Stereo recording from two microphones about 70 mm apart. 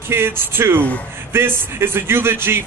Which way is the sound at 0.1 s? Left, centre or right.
Right.